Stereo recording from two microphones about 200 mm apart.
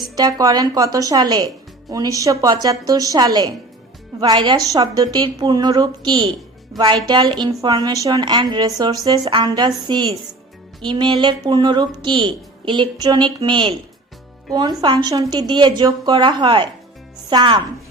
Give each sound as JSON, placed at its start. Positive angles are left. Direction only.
{"t": 0.2, "sound": "a woman's voice", "side_deg": -20}